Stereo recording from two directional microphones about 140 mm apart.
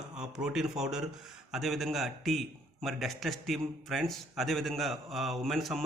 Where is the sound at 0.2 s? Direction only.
5° right (ahead or behind).